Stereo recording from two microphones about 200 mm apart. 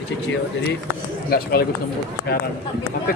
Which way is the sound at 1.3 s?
50° left (ahead or behind).